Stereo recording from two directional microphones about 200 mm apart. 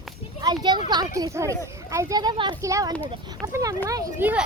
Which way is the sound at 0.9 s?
20° right (ahead or behind).